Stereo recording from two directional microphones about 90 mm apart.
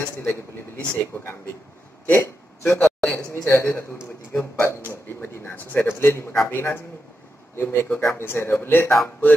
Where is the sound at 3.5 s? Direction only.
30° left (ahead or behind).